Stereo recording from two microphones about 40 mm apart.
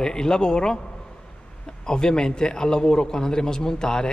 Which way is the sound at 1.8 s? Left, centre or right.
Centre.